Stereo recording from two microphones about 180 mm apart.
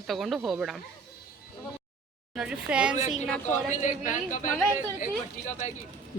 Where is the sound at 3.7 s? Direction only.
45° left (ahead or behind).